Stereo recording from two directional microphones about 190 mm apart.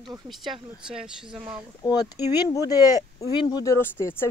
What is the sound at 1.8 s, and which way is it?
Speech, 20° left (ahead or behind).